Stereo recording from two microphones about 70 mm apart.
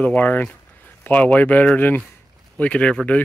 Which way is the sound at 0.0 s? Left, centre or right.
Left.